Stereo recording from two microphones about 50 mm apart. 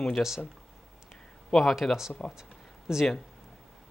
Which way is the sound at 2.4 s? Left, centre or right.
Centre.